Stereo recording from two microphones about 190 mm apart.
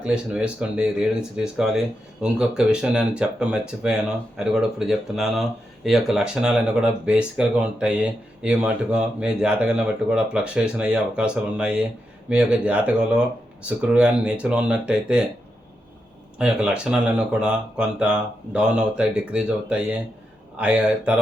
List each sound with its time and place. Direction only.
0.0 s speech: 5° right (ahead or behind)
16.4 s speech: 5° right (ahead or behind)